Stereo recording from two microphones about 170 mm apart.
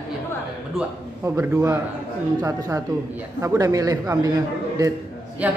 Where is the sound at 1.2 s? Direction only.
15° right (ahead or behind).